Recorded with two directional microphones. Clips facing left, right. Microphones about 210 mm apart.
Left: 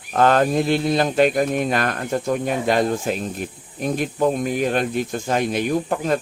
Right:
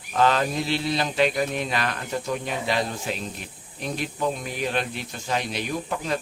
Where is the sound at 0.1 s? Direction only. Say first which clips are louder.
Left 5 dB; 50° left (ahead or behind).